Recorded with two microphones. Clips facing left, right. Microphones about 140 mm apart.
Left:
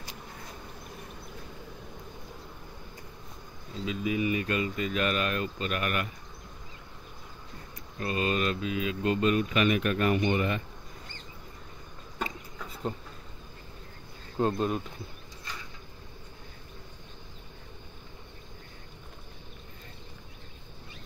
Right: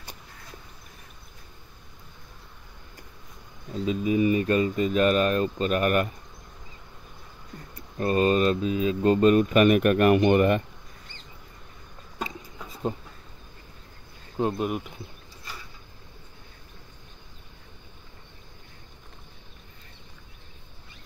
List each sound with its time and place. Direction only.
3.8 s speech: 40° right (ahead or behind)
8.0 s speech: 40° right (ahead or behind)
12.5 s insect: 15° right (ahead or behind)
14.3 s speech: 10° right (ahead or behind)